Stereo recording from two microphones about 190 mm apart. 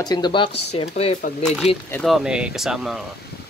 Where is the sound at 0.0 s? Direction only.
20° left (ahead or behind).